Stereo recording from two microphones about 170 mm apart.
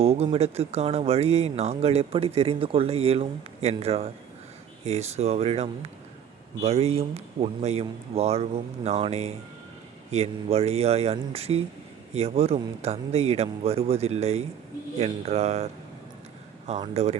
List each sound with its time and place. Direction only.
0.0 s speech: 35° right (ahead or behind)
16.8 s speech: 35° right (ahead or behind)